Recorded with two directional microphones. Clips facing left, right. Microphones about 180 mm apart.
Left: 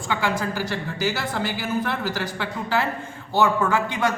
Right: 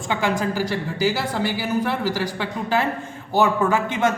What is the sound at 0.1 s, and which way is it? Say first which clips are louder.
A man's voice: right 2 dB; 15° right (ahead or behind).